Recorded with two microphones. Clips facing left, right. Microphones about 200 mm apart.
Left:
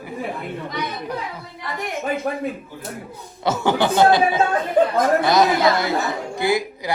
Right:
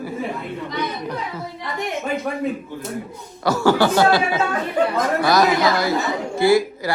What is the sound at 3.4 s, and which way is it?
A woman's voice, 20° left (ahead or behind).